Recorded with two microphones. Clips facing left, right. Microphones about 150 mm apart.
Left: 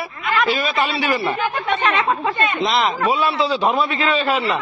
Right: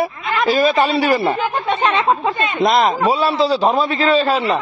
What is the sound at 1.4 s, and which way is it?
Speech, 25° right (ahead or behind).